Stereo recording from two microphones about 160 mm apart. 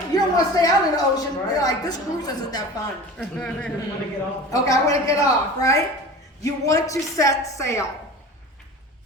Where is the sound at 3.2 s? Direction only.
5° left (ahead or behind).